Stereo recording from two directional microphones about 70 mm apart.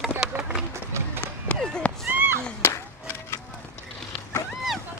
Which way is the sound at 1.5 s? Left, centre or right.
Left.